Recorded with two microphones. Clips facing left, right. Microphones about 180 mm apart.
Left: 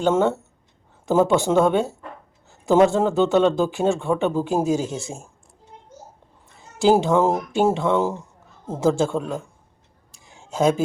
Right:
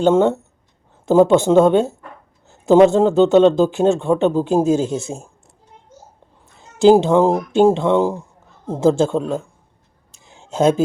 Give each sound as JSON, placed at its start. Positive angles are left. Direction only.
{"t": 0.0, "sound": "a man's voice", "side_deg": -20}
{"t": 6.7, "sound": "a man's voice", "side_deg": -20}
{"t": 10.2, "sound": "a sound", "side_deg": -20}